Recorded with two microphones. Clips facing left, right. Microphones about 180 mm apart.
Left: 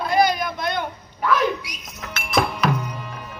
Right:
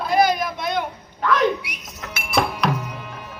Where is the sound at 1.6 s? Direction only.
60° right (ahead or behind).